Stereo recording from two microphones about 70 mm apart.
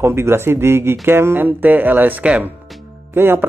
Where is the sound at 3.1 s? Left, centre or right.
Right.